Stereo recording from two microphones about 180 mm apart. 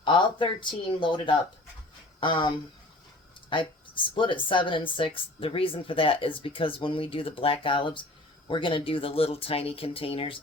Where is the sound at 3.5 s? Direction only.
25° left (ahead or behind).